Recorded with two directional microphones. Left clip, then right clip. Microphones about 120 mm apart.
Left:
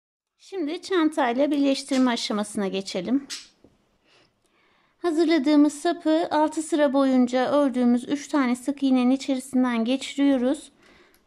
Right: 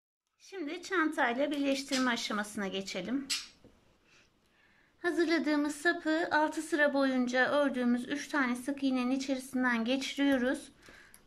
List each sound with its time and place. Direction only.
0.4 s speech: 40° left (ahead or behind)
5.0 s speech: 35° left (ahead or behind)